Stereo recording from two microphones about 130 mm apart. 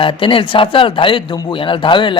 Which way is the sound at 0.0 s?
40° left (ahead or behind).